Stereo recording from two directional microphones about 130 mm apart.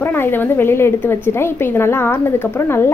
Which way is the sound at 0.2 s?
20° left (ahead or behind).